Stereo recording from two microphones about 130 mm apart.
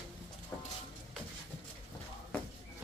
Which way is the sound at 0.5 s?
20° left (ahead or behind).